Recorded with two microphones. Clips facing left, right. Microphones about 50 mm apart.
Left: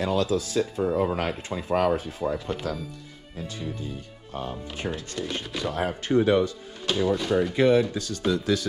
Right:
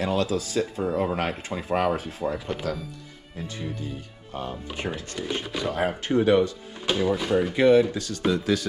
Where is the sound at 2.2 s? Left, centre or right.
Centre.